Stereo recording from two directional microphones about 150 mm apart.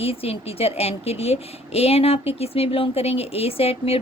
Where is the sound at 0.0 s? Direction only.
40° left (ahead or behind).